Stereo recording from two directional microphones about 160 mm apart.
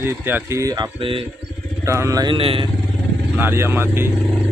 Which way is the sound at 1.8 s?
20° right (ahead or behind).